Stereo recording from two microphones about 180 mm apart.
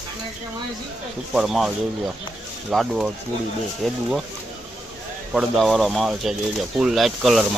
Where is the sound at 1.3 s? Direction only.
Centre (ahead or behind).